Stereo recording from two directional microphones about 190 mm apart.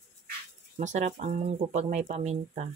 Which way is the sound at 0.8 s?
40° right (ahead or behind).